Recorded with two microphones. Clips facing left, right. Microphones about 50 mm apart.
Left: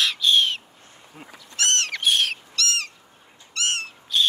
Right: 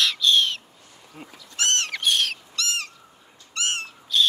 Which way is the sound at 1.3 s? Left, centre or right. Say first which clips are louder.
Left 1 dB; left.